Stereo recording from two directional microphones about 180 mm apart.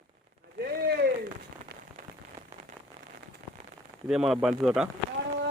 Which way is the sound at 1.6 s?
35° right (ahead or behind).